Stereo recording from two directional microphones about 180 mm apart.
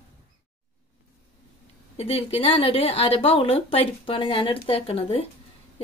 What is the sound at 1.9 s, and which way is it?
Speech, 35° left (ahead or behind).